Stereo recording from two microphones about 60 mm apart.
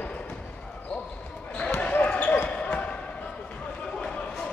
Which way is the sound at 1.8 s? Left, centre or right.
Left.